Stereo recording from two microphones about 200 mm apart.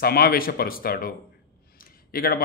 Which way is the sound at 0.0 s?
50° left (ahead or behind).